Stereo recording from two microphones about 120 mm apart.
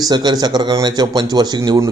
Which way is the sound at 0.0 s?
40° right (ahead or behind).